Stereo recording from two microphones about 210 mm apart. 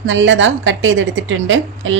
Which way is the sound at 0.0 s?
60° right (ahead or behind).